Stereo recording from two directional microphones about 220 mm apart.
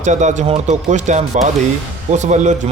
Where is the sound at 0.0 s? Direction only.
35° right (ahead or behind).